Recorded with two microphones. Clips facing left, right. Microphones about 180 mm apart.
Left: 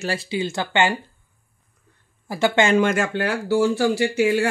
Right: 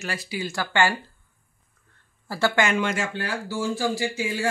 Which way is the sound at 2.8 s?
55° left (ahead or behind).